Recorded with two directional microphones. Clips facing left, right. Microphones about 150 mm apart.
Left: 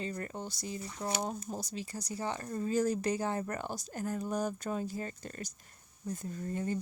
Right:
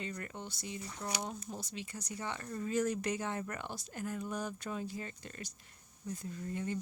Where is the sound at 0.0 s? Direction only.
35° left (ahead or behind).